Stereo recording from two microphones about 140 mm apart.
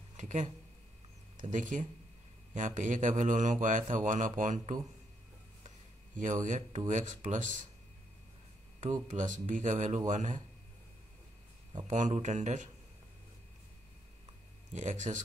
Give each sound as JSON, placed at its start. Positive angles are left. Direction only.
{"t": 0.2, "sound": "speech", "side_deg": -60}
{"t": 6.1, "sound": "speech", "side_deg": -65}
{"t": 8.8, "sound": "speech", "side_deg": -60}
{"t": 11.9, "sound": "speech", "side_deg": -60}
{"t": 14.7, "sound": "speech", "side_deg": -60}